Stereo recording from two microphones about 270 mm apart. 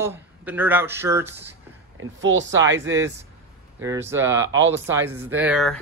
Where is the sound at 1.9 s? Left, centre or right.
Right.